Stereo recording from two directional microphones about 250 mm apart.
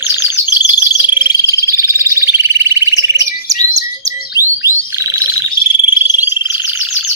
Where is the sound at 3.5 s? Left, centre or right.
Centre.